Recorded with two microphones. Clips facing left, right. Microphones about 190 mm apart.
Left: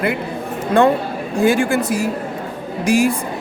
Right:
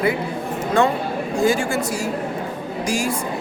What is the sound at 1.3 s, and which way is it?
Speech, 60° left (ahead or behind).